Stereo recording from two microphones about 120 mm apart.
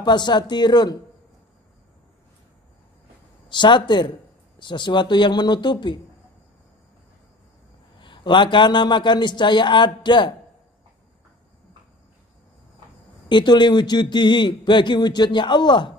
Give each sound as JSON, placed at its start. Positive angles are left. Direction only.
{"t": 0.0, "sound": "a man's voice", "side_deg": 35}
{"t": 3.4, "sound": "a man's voice", "side_deg": 40}
{"t": 8.0, "sound": "a man's voice", "side_deg": 40}
{"t": 13.3, "sound": "a man's voice", "side_deg": 40}